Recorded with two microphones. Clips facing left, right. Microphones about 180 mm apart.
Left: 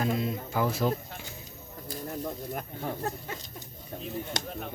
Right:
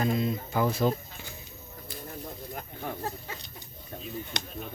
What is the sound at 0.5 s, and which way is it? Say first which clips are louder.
Speech: right 1 dB; 5° left (ahead or behind).